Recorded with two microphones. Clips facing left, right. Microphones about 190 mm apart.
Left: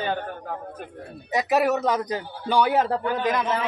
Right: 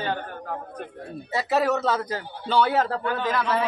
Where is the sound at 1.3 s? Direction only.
15° left (ahead or behind).